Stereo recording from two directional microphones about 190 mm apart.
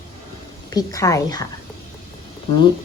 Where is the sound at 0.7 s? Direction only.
20° left (ahead or behind).